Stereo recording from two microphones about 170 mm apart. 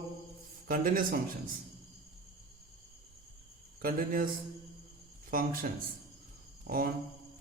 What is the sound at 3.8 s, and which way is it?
Speech, 55° right (ahead or behind).